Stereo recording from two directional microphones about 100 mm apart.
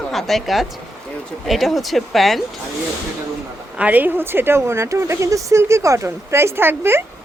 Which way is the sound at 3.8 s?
15° right (ahead or behind).